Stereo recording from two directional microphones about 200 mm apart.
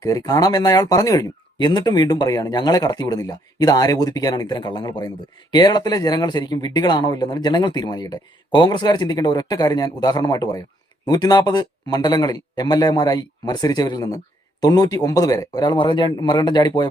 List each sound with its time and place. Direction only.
0.0 s speech: 20° left (ahead or behind)